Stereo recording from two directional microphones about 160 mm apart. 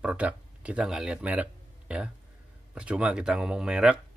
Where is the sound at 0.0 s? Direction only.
5° right (ahead or behind).